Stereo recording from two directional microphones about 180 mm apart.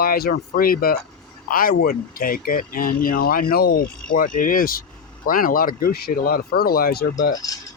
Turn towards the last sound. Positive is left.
turn(degrees=20)  # may be behind; listen again after turning